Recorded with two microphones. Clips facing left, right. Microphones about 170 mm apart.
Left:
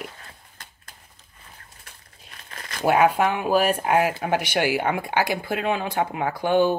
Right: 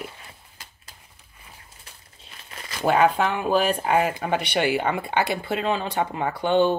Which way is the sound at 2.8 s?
10° left (ahead or behind).